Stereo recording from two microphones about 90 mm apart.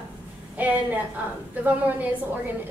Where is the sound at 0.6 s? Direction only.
20° right (ahead or behind).